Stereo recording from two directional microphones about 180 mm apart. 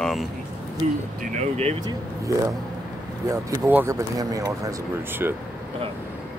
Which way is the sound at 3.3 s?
15° right (ahead or behind).